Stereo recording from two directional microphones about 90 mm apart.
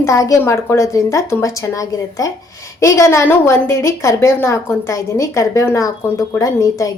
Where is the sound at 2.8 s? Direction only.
35° left (ahead or behind).